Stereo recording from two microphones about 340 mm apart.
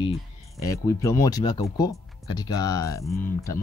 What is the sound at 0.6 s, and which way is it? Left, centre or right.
Speech, centre.